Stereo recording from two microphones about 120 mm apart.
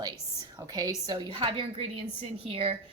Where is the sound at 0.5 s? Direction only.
35° right (ahead or behind).